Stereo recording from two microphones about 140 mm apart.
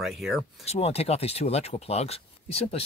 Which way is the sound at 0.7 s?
45° left (ahead or behind).